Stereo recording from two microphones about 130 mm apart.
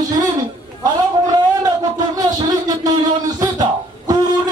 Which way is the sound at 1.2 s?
30° right (ahead or behind).